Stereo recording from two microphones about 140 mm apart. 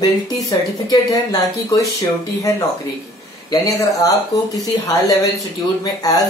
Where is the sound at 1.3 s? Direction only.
25° left (ahead or behind).